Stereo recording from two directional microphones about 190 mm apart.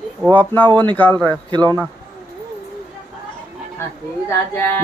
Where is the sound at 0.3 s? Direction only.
10° left (ahead or behind).